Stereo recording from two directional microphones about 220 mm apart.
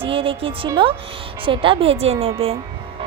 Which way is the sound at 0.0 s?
25° right (ahead or behind).